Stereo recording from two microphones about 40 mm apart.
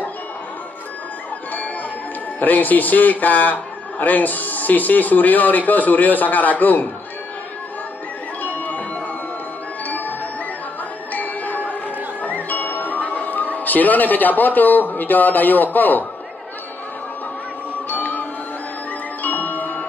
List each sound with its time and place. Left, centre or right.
2.4 s speech: left
8.4 s music: left
9.8 s music: left
11.1 s music: left
12.4 s speech: left
17.8 s music: left
19.2 s music: left